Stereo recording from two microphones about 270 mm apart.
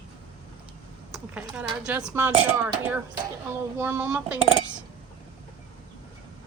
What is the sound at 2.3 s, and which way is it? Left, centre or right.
Speech, right.